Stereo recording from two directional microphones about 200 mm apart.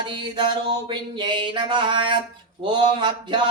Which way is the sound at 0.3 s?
20° right (ahead or behind).